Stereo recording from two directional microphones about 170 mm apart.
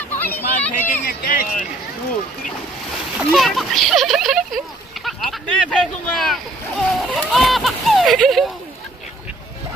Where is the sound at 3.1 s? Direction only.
Centre (ahead or behind).